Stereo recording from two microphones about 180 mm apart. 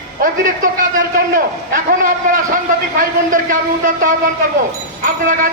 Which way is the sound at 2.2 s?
50° right (ahead or behind).